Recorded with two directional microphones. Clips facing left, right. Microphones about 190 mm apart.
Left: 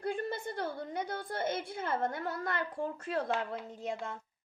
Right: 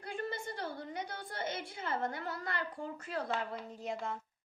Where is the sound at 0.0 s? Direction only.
55° left (ahead or behind).